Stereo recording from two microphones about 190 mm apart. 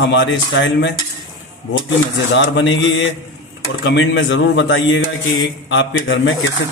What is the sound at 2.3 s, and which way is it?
Speech, 75° left (ahead or behind).